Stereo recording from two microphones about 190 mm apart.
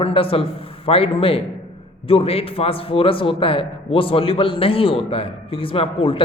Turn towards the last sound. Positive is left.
turn(degrees=30)  # may be behind; listen again after turning